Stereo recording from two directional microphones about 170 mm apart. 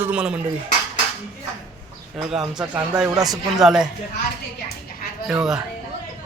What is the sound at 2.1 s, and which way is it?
Speech, 5° right (ahead or behind).